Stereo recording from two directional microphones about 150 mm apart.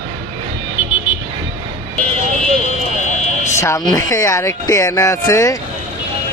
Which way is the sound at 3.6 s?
20° left (ahead or behind).